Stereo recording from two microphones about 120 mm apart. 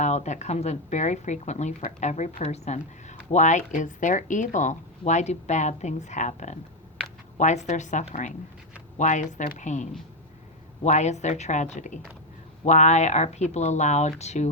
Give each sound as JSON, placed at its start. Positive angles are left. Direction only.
{"t": 0.0, "sound": "a woman's voice", "side_deg": 75}
{"t": 10.8, "sound": "speech", "side_deg": 70}